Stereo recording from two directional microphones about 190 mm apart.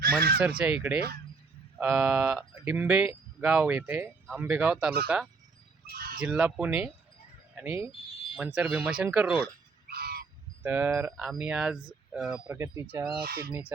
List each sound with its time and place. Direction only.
0.0 s fowl: 50° right (ahead or behind)
0.4 s speech: 5° right (ahead or behind)
5.9 s fowl: 50° right (ahead or behind)
6.1 s speech: 5° right (ahead or behind)
9.9 s frog: 55° right (ahead or behind)
10.6 s speech: 10° right (ahead or behind)
12.5 s speech: 15° right (ahead or behind)
13.2 s speech: 50° right (ahead or behind)
13.5 s speech: 10° right (ahead or behind)